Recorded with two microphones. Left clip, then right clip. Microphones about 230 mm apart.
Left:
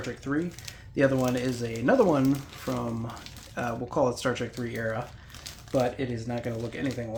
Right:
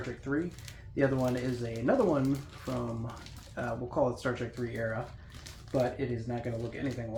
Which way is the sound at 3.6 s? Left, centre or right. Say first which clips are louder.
Left 4 dB; left.